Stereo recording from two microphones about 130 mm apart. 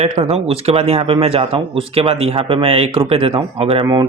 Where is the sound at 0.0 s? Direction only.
50° right (ahead or behind).